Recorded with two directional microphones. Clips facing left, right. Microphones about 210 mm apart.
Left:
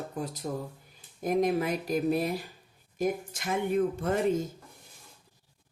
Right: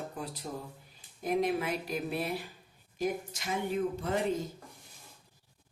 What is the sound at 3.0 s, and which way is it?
Speech, 55° left (ahead or behind).